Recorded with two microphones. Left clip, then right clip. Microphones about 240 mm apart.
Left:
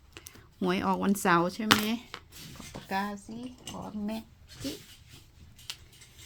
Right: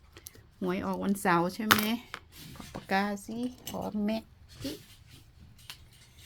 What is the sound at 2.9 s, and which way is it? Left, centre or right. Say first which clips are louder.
Speech: right 3 dB; right.